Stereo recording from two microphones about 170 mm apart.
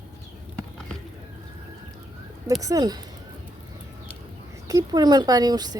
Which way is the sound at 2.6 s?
20° right (ahead or behind).